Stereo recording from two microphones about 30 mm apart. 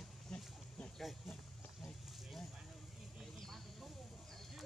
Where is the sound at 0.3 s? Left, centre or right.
Centre.